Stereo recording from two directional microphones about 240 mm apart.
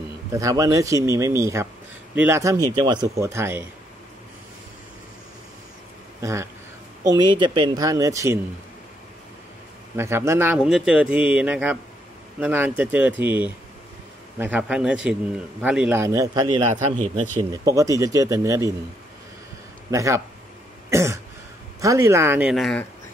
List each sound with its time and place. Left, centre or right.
0.3 s a man's voice: centre
6.2 s a man's voice: centre
9.9 s a man's voice: centre
19.9 s a man's voice: centre
20.9 s throat clearing: centre
21.8 s a man's voice: centre